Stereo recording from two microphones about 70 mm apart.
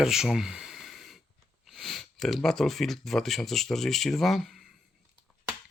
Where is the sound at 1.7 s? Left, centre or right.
Centre.